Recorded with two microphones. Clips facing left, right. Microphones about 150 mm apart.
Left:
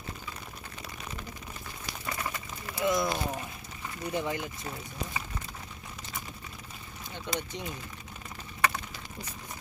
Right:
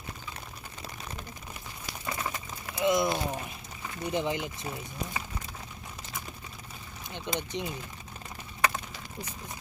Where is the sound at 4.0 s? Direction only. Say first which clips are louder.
Right 2 dB; 20° right (ahead or behind).